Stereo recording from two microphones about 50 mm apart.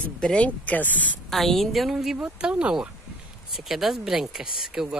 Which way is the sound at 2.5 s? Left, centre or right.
Right.